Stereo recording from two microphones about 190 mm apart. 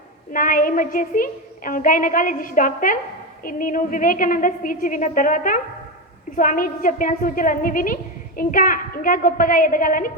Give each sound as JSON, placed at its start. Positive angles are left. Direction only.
{"t": 0.3, "sound": "a woman's voice", "side_deg": 45}